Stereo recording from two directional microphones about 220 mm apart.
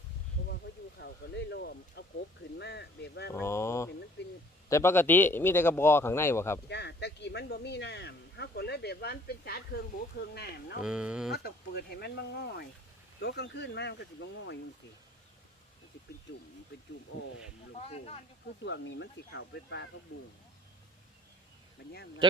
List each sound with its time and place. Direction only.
0.5 s speech: 50° left (ahead or behind)
3.3 s speech: 10° left (ahead or behind)
4.2 s speech: 50° left (ahead or behind)
4.7 s speech: 10° left (ahead or behind)
6.7 s speech: 50° left (ahead or behind)
10.8 s speech: 5° right (ahead or behind)
11.4 s speech: 45° left (ahead or behind)
17.7 s speech: 30° left (ahead or behind)
18.6 s speech: 55° left (ahead or behind)